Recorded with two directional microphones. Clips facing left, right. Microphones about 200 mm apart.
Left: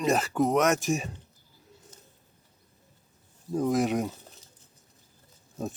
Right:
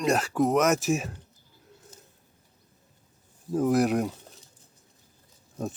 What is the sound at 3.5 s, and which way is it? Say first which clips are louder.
Speech: right 2 dB; 5° right (ahead or behind).